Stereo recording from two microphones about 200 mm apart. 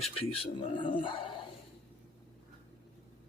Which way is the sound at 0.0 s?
25° left (ahead or behind).